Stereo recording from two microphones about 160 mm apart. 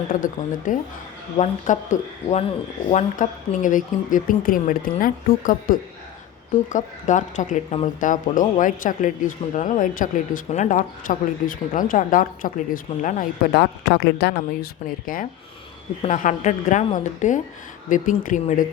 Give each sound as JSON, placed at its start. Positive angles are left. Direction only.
{"t": 0.1, "sound": "a woman's voice", "side_deg": 55}